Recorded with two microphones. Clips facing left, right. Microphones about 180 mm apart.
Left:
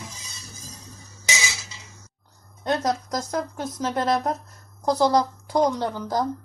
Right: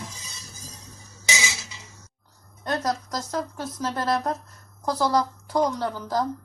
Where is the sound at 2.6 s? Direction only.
20° left (ahead or behind).